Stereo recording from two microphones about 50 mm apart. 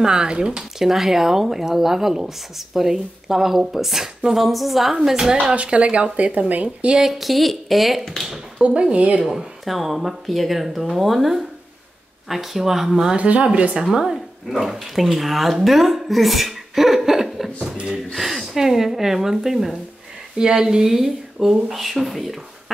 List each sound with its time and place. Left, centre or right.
0.0 s speech: centre
0.5 s speech: centre
5.4 s speech: right
7.0 s speech: centre
8.2 s speech: centre
8.9 s speech: right
9.2 s speech: centre
13.1 s speech: right
13.8 s speech: centre